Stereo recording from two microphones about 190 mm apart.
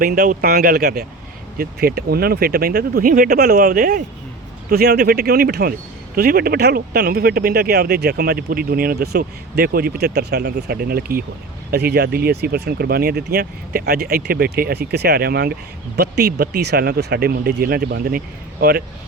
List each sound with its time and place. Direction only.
0.0 s speech: 50° right (ahead or behind)